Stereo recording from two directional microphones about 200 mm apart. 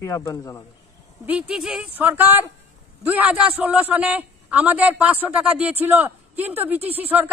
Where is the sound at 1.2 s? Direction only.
5° right (ahead or behind).